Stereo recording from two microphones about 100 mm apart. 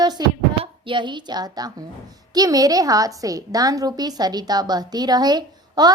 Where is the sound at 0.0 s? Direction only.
45° right (ahead or behind).